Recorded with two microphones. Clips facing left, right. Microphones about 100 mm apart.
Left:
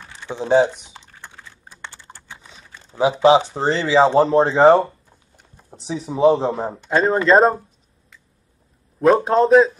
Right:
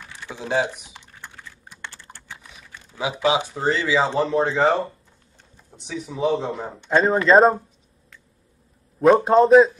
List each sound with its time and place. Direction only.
0.0 s typing: 25° left (ahead or behind)
4.3 s speech: 35° left (ahead or behind)
6.9 s a man's voice: centre (ahead or behind)
9.0 s a man's voice: centre (ahead or behind)